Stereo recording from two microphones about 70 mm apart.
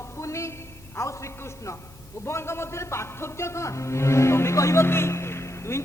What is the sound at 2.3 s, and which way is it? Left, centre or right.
Speech, left.